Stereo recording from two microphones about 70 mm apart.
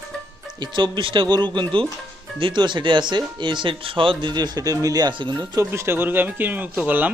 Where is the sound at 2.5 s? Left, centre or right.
Right.